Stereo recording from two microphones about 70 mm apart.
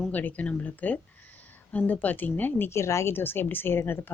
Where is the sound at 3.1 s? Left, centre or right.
Left.